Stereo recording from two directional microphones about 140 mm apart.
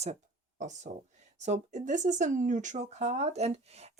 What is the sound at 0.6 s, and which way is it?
Speech, 60° right (ahead or behind).